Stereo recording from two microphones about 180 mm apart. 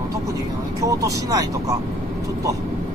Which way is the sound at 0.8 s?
20° right (ahead or behind).